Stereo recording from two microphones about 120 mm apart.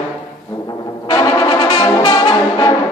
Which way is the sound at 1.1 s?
35° left (ahead or behind).